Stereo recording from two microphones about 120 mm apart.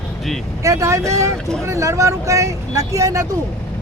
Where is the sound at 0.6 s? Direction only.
25° right (ahead or behind).